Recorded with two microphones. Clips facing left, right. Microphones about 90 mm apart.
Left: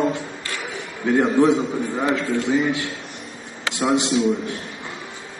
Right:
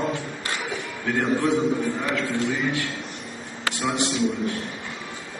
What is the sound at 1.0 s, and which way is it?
A man's voice, 20° left (ahead or behind).